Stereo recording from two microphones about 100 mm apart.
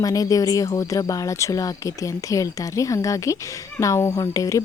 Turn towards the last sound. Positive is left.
turn(degrees=35)  # may be behind; listen again after turning